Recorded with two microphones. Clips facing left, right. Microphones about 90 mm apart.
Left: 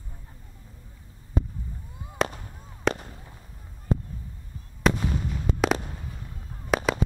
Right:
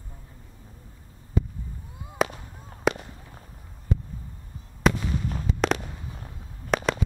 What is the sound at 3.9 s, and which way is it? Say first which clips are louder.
Heart sounds: left 3 dB; 35° left (ahead or behind).